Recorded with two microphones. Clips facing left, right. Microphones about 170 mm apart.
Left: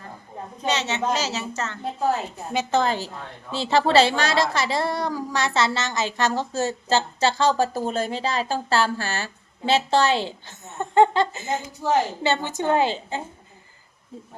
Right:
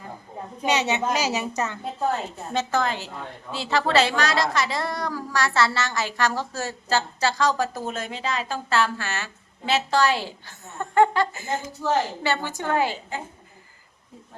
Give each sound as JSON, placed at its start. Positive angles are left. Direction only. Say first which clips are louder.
{"t": 0.6, "sound": "speech", "louder": "right 1 dB", "side_deg": -15}
{"t": 1.8, "sound": "a woman's voice", "louder": "left 5 dB", "side_deg": 5}
{"t": 2.7, "sound": "a woman's voice", "louder": "left 6 dB", "side_deg": 35}